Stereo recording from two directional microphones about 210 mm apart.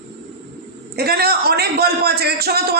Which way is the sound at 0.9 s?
50° right (ahead or behind).